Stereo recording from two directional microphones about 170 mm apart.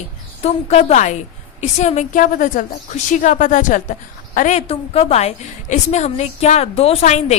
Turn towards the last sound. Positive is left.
turn(degrees=40)  # may be behind; listen again after turning